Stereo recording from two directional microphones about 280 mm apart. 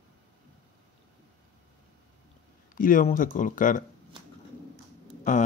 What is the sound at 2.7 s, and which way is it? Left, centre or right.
Speech, left.